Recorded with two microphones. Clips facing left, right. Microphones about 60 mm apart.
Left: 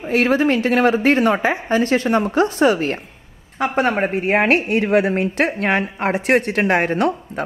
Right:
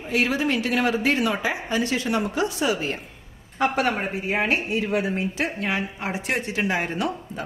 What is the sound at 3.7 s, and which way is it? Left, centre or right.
Speech, left.